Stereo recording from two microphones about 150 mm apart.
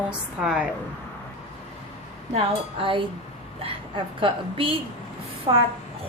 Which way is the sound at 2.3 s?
35° right (ahead or behind).